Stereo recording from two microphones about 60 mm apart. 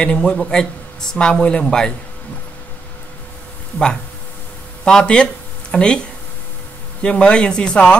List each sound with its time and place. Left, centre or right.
0.0 s speech: centre
3.7 s speech: centre
7.0 s speech: centre